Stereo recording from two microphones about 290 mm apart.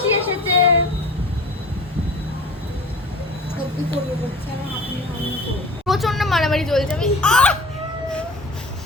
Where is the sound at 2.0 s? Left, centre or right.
Centre.